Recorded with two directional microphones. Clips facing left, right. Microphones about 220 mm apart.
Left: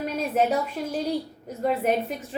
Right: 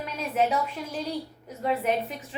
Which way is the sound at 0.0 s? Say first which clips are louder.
Left 3 dB; 45° left (ahead or behind).